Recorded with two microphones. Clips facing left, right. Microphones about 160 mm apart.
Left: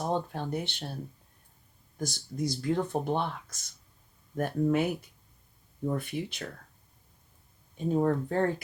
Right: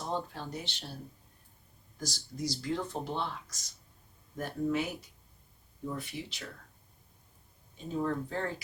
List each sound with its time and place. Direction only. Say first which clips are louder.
0.0 s speech: left 5 dB; 60° left (ahead or behind)
2.0 s speech: left 5 dB; 55° left (ahead or behind)
7.9 s speech: left 6 dB; 50° left (ahead or behind)